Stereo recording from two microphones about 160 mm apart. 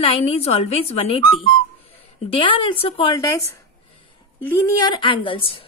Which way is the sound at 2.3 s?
35° left (ahead or behind).